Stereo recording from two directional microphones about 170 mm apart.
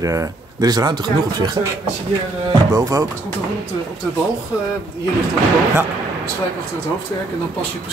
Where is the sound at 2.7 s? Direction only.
20° right (ahead or behind).